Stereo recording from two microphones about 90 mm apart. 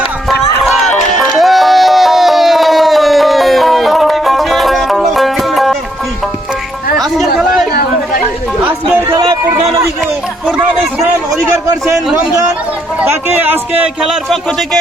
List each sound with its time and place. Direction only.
0.3 s music: centre (ahead or behind)
7.0 s a sound: centre (ahead or behind)
8.6 s chatter: 20° right (ahead or behind)
13.1 s speech: 25° right (ahead or behind)
14.0 s speech: centre (ahead or behind)